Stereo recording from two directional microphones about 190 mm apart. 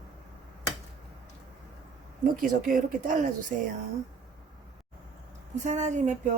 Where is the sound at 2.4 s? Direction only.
45° right (ahead or behind).